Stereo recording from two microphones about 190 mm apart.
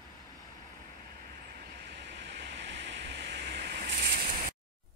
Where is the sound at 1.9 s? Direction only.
65° right (ahead or behind); by 4.2 s 50° right (ahead or behind).